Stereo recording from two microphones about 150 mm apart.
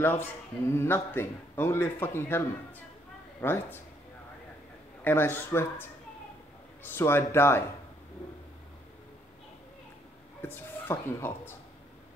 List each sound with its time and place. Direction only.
0.0 s a man's voice: 15° left (ahead or behind)
5.0 s a man's voice: 15° left (ahead or behind)
10.4 s speech: 15° left (ahead or behind)